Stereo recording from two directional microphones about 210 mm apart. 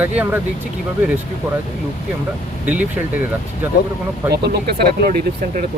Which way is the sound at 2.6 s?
5° right (ahead or behind).